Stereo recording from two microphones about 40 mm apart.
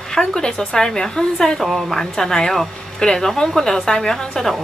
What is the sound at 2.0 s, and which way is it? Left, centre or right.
Speech, centre.